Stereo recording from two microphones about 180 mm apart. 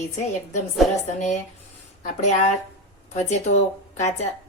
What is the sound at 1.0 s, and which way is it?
Speech, 40° left (ahead or behind).